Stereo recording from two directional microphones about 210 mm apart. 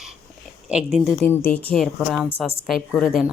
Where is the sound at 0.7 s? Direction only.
5° right (ahead or behind).